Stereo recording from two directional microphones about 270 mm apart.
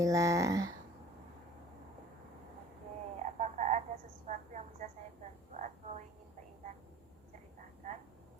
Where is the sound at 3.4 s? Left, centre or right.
Right.